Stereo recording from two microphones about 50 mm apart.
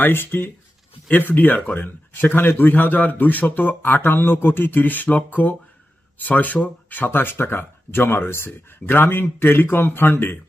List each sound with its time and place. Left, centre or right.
0.0 s speech: left
1.1 s a man's voice: left